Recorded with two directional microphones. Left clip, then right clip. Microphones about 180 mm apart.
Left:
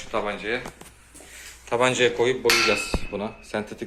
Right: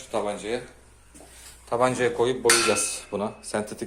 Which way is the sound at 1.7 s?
5° left (ahead or behind).